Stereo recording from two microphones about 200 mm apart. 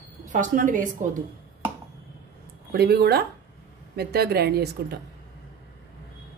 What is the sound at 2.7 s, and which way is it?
A woman's voice, 50° right (ahead or behind).